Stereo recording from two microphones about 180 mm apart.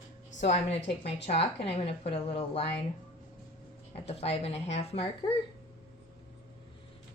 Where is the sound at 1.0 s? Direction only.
35° left (ahead or behind).